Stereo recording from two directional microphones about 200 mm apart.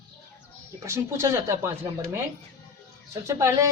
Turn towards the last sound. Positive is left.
turn(degrees=-15)  # may be behind; listen again after turning